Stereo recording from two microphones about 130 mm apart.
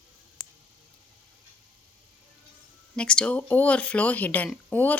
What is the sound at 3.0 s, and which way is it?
Speech, 5° left (ahead or behind).